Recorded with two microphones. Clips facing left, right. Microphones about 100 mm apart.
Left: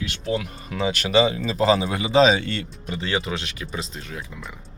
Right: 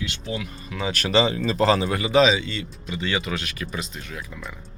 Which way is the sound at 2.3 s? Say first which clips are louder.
Left 2 dB; 55° left (ahead or behind).